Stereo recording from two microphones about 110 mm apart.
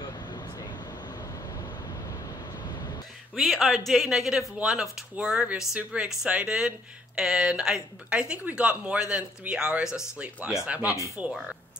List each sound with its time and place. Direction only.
0.3 s vehicle: 40° left (ahead or behind)
3.3 s speech: centre (ahead or behind)